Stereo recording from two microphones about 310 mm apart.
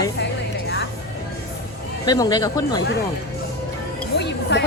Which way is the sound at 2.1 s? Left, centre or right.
Centre.